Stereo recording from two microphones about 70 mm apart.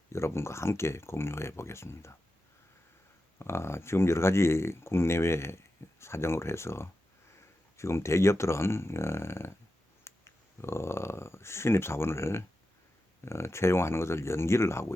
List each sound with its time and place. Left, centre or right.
0.1 s speech: left
3.3 s speech: left